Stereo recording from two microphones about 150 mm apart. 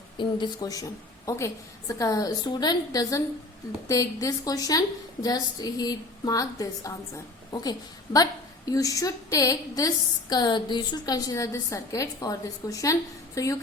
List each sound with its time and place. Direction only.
0.2 s a woman's voice: 30° left (ahead or behind)